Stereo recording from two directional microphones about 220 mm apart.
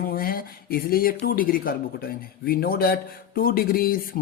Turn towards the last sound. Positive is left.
turn(degrees=40)  # may be behind; listen again after turning